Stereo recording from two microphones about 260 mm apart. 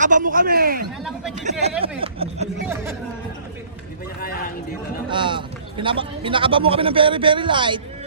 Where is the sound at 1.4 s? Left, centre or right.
Right.